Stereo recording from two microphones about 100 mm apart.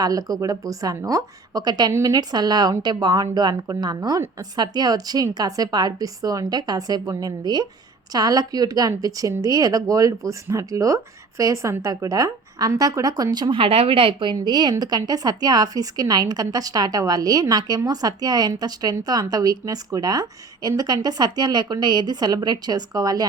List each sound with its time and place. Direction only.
0.0 s a woman's voice: 35° right (ahead or behind)
13.5 s a woman's voice: 65° right (ahead or behind)
14.3 s a woman's voice: 45° right (ahead or behind)